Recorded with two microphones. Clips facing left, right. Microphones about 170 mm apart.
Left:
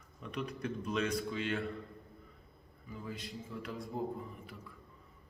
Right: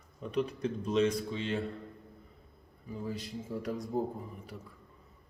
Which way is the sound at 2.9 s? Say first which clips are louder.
Right 5 dB; 45° right (ahead or behind).